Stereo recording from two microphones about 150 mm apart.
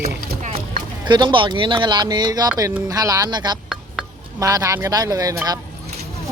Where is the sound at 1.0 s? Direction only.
30° right (ahead or behind).